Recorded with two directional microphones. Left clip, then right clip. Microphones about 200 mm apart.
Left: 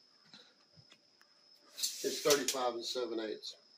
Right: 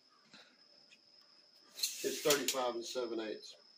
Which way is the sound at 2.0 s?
5° left (ahead or behind).